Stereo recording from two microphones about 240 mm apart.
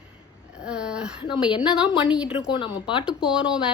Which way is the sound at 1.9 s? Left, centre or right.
Centre.